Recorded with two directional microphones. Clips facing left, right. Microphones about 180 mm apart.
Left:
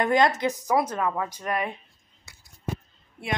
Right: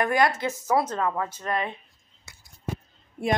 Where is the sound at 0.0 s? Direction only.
20° left (ahead or behind).